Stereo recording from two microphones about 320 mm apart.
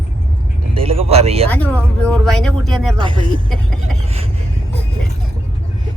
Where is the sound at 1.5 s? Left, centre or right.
Centre.